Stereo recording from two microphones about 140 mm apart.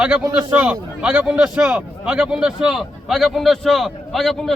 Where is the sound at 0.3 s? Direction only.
10° right (ahead or behind).